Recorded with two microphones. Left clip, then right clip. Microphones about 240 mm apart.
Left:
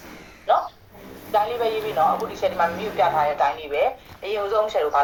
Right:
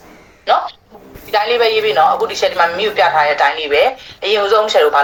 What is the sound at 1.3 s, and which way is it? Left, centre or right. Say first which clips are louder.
Speech: right 9 dB; right.